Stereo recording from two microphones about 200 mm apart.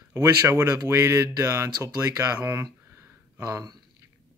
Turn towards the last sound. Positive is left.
turn(degrees=-15)  # may be behind; listen again after turning